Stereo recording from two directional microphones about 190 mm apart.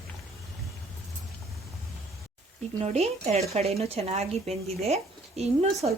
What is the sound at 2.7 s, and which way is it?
Speech, 35° right (ahead or behind).